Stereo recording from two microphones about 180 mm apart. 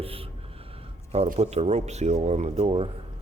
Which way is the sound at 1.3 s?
35° right (ahead or behind).